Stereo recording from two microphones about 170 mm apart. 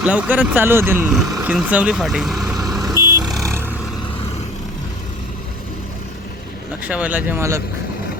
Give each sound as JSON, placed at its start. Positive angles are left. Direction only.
{"t": 0.0, "sound": "speech", "side_deg": -10}
{"t": 2.8, "sound": "vehicle", "side_deg": -20}
{"t": 3.2, "sound": "vehicle", "side_deg": 0}
{"t": 6.8, "sound": "speech", "side_deg": -10}